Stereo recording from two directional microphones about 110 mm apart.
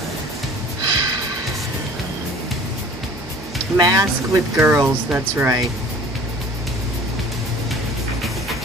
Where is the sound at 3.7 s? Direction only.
35° right (ahead or behind).